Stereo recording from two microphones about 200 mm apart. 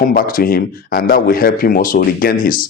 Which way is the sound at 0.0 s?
45° left (ahead or behind).